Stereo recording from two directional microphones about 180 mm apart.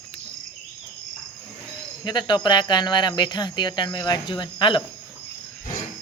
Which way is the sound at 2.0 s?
25° left (ahead or behind).